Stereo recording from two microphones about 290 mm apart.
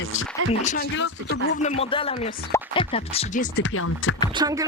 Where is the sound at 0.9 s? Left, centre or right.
Left.